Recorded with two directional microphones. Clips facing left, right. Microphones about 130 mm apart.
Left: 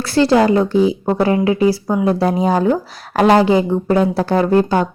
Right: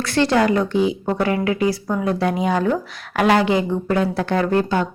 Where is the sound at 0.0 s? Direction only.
35° left (ahead or behind).